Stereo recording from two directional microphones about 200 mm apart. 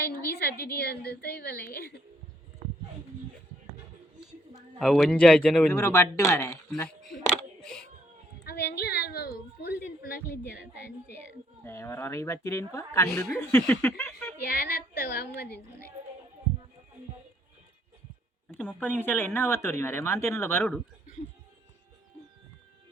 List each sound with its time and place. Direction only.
0.3 s a sound: 50° left (ahead or behind)
0.6 s a woman's voice: 50° left (ahead or behind)
4.8 s a man's voice: centre (ahead or behind)
5.7 s speech: 15° left (ahead or behind)
7.3 s a sound: 5° left (ahead or behind)
8.4 s a sound: 50° left (ahead or behind)
11.6 s speech: 15° left (ahead or behind)
13.1 s a man's voice: 5° left (ahead or behind)
14.4 s a woman's voice: 50° left (ahead or behind)
18.7 s speech: 10° left (ahead or behind)